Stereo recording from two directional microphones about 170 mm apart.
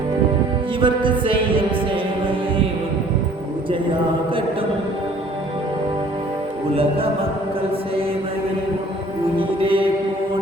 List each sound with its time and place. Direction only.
0.8 s music: 30° right (ahead or behind)
9.4 s music: 30° right (ahead or behind)